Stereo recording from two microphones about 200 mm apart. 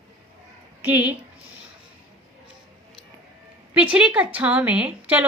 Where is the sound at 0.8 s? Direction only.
10° right (ahead or behind).